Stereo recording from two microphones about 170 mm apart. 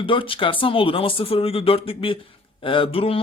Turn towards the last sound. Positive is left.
turn(degrees=35)  # may be behind; listen again after turning